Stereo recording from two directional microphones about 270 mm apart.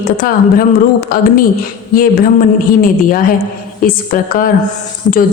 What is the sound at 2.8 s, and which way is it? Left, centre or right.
A woman's voice, left.